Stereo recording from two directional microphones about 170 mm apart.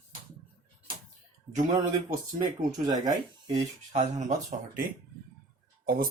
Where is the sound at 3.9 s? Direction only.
40° right (ahead or behind).